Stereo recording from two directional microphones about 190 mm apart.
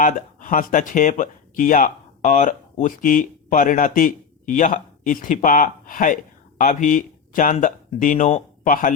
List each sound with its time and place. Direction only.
0.0 s speech: 45° left (ahead or behind)